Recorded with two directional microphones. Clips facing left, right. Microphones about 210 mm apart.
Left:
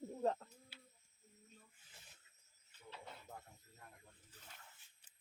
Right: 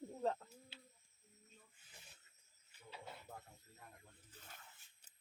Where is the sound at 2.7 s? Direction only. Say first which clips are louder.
Even; 10° right (ahead or behind).